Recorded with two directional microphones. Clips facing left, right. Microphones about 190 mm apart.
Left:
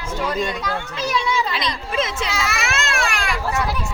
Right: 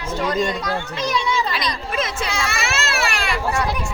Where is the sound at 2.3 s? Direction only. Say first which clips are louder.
Even; centre (ahead or behind).